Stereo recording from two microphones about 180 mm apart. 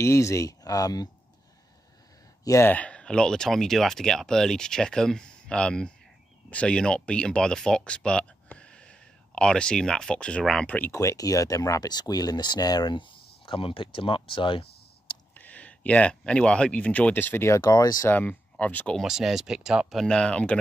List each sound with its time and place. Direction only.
0.0 s speech: 15° left (ahead or behind)
2.4 s speech: 15° left (ahead or behind)
15.3 s speech: 10° left (ahead or behind)
18.1 s speech: 10° left (ahead or behind)